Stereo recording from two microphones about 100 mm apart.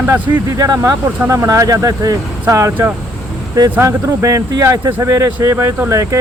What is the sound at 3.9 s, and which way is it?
Speech, 30° right (ahead or behind).